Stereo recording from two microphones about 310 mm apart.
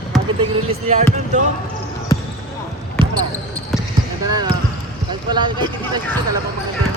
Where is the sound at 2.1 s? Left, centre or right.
Centre.